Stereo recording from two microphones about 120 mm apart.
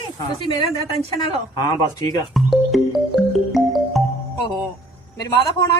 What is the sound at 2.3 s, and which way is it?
Music, centre (ahead or behind).